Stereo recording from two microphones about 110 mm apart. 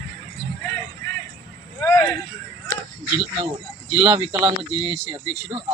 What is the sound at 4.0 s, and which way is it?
Speech, 40° right (ahead or behind).